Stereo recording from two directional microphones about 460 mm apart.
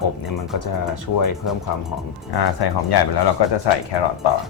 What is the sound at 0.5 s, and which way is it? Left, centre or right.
Speech, left.